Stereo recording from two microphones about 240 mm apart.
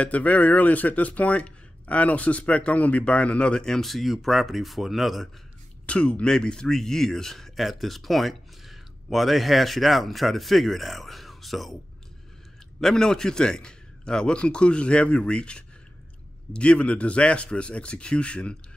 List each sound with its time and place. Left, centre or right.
0.0 s speech: centre
12.8 s speech: centre